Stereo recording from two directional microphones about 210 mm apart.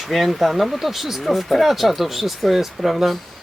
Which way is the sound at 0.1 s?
Centre (ahead or behind).